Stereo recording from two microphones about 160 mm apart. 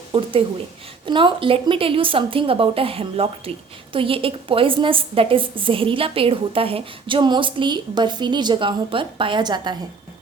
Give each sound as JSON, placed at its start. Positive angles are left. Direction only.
{"t": 0.1, "sound": "a woman's voice", "side_deg": -35}